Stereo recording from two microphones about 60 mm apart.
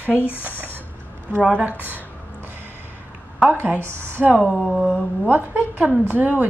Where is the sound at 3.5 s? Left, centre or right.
Right.